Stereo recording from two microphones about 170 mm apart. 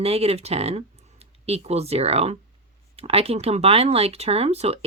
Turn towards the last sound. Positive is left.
turn(degrees=-40)  # may be behind; listen again after turning